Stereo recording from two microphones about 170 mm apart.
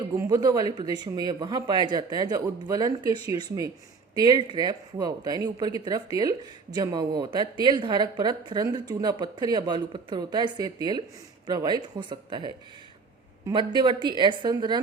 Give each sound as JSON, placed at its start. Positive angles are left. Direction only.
{"t": 0.2, "sound": "a woman's voice", "side_deg": -20}